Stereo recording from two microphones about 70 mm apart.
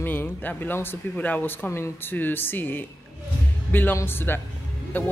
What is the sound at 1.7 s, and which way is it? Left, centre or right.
Speech, left.